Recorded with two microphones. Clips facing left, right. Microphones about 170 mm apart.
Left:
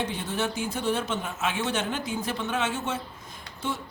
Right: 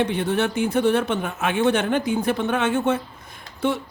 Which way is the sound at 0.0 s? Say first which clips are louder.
Right 8 dB; 60° right (ahead or behind).